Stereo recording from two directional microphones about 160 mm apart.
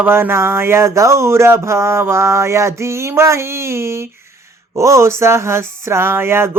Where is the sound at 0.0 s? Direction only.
15° right (ahead or behind).